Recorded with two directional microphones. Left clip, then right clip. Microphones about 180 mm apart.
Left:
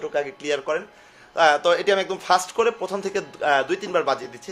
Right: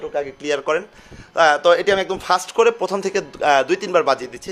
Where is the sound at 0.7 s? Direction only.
40° right (ahead or behind).